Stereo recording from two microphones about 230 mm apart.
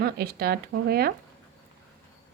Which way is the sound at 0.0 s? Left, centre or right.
Right.